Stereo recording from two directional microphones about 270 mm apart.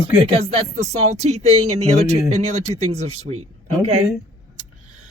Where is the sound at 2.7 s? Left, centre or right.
Right.